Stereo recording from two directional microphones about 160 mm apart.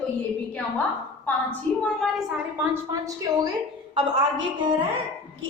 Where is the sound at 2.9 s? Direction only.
20° right (ahead or behind).